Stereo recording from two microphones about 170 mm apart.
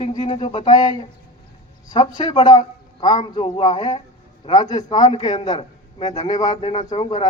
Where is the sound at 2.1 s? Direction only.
25° left (ahead or behind); by 7.2 s 40° left (ahead or behind).